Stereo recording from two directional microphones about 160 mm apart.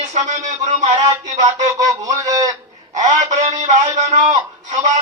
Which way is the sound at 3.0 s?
45° right (ahead or behind).